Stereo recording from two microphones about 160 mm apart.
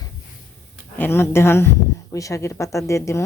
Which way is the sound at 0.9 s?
15° left (ahead or behind).